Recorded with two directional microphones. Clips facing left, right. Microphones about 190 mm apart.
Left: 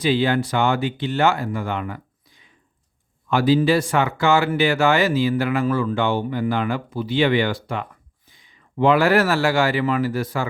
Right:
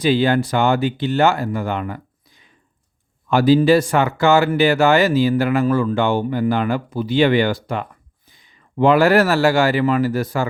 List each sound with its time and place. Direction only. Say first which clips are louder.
0.0 s speech: right 3 dB; 45° right (ahead or behind)